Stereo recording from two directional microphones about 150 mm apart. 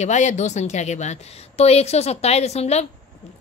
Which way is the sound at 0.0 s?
50° left (ahead or behind).